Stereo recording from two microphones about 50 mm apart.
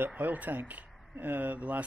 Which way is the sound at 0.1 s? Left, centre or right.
Right.